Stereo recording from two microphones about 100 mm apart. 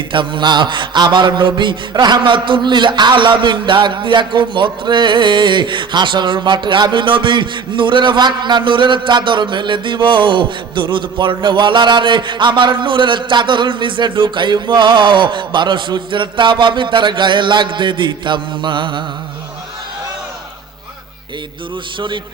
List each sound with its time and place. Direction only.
0.1 s mantra: 55° right (ahead or behind)